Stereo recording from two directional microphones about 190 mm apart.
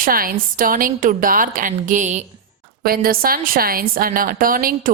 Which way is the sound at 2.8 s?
50° right (ahead or behind).